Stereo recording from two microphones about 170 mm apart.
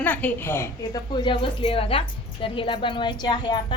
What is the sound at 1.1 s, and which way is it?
A woman's voice, 30° left (ahead or behind).